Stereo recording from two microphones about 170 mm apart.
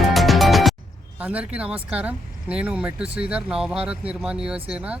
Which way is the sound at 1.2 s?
10° right (ahead or behind).